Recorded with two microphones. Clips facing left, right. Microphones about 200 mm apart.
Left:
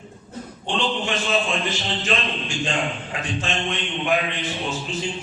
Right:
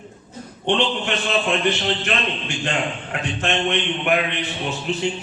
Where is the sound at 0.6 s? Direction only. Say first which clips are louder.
Right 4 dB; 65° right (ahead or behind).